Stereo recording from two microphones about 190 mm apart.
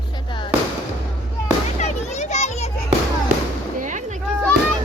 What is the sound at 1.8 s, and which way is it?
Children playing, 35° left (ahead or behind).